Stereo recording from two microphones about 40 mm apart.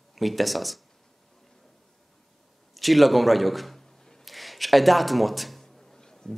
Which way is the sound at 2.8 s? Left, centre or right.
Centre.